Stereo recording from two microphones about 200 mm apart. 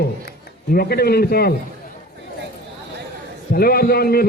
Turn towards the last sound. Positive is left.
turn(degrees=50)  # may be behind; listen again after turning